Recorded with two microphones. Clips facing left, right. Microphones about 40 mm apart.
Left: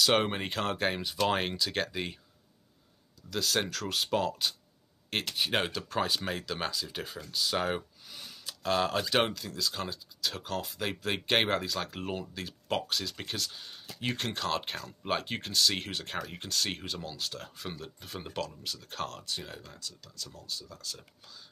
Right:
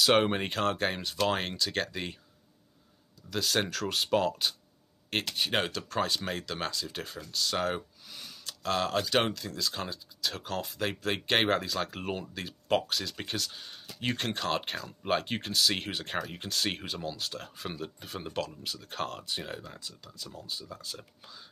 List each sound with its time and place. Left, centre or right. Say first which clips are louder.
0.0 s speech: right 2 dB; centre
3.3 s speech: right 1 dB; centre; by 21.4 s right